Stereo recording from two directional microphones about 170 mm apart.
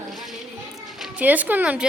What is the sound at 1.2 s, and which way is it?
Speech, 10° right (ahead or behind).